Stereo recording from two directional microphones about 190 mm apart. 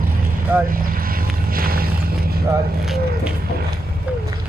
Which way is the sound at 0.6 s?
50° right (ahead or behind).